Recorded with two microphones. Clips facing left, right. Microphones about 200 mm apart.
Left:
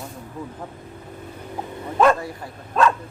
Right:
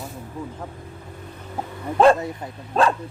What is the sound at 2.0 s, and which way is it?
Speech, 25° right (ahead or behind).